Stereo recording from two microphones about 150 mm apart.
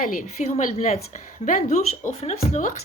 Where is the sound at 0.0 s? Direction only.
60° left (ahead or behind).